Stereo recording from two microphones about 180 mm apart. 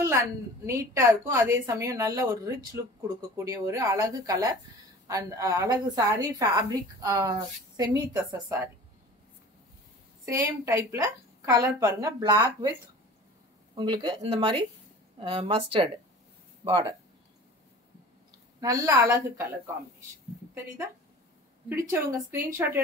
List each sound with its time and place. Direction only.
0.0 s a woman's voice: 15° right (ahead or behind)
10.3 s a woman's voice: 20° right (ahead or behind)
13.7 s a woman's voice: 25° right (ahead or behind)
18.6 s a woman's voice: 20° right (ahead or behind)
21.6 s a woman's voice: 15° right (ahead or behind)